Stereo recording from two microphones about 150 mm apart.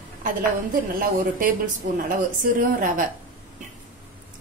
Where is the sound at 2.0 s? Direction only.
65° right (ahead or behind).